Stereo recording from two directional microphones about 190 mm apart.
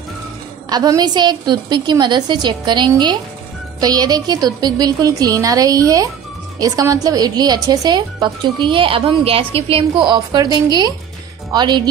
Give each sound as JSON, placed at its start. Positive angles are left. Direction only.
{"t": 0.7, "sound": "a woman's voice", "side_deg": -20}